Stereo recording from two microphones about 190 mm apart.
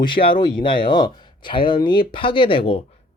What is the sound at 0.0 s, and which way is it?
Speech, 25° left (ahead or behind).